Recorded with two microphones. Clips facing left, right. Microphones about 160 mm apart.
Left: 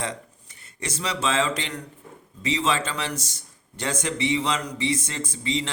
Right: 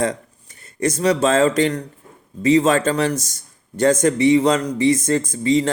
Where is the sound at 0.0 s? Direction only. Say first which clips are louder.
Right 10 dB; 45° right (ahead or behind).